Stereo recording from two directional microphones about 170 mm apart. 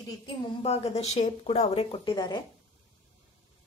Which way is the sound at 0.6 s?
40° left (ahead or behind).